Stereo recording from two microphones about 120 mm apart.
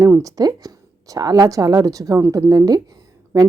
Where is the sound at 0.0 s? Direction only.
30° right (ahead or behind).